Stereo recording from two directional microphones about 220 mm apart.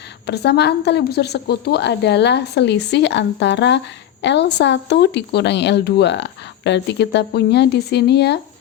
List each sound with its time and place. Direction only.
0.3 s speech: 50° left (ahead or behind)